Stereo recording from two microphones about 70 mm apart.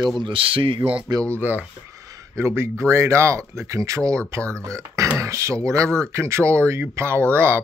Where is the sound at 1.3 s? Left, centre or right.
Right.